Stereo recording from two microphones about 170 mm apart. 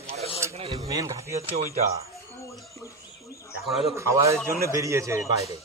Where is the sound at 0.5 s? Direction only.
35° right (ahead or behind).